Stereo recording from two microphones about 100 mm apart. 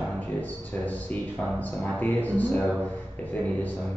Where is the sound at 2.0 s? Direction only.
15° left (ahead or behind).